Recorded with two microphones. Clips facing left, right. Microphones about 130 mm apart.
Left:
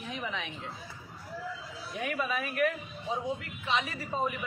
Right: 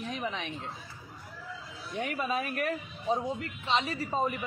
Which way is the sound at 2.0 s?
30° right (ahead or behind).